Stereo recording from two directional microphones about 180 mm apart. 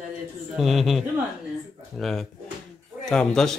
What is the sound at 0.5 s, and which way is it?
Speech, centre (ahead or behind).